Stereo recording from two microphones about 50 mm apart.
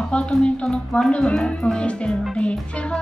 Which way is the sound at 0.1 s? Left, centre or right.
Centre.